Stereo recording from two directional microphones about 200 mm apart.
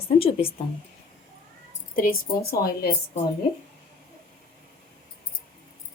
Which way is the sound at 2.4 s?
50° left (ahead or behind).